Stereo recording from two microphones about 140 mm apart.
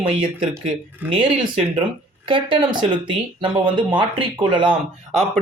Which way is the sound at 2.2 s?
35° right (ahead or behind).